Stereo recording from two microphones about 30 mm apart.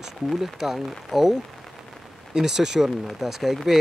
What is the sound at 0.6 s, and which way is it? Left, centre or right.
Speech, centre.